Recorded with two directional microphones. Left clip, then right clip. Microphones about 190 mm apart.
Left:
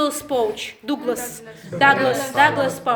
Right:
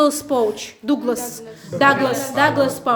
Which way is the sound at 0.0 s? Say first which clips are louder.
Right 4 dB; 50° right (ahead or behind).